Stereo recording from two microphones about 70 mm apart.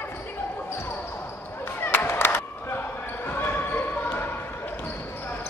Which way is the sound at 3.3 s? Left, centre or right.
Left.